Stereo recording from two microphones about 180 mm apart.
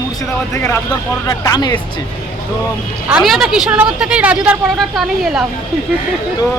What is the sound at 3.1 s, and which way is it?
A woman's voice, centre (ahead or behind).